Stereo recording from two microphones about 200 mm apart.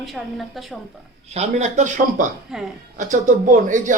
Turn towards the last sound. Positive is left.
turn(degrees=-40)  # may be behind; listen again after turning